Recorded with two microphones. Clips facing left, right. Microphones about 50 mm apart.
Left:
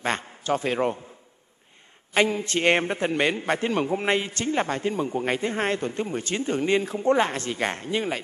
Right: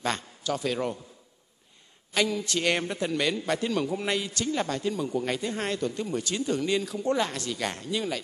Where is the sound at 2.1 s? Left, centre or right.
Left.